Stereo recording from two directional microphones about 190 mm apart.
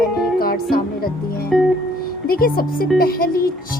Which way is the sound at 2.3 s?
50° left (ahead or behind).